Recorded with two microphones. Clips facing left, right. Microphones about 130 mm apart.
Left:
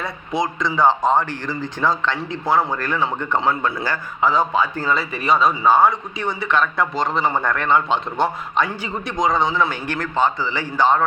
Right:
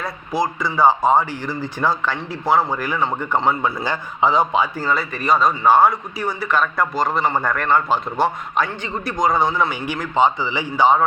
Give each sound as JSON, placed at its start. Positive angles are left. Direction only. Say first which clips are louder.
{"t": 0.0, "sound": "a man's voice", "louder": "right 1 dB", "side_deg": 0}
{"t": 3.8, "sound": "a man's voice", "louder": "right 2 dB", "side_deg": -20}
{"t": 4.9, "sound": "a man's voice", "louder": "even", "side_deg": 0}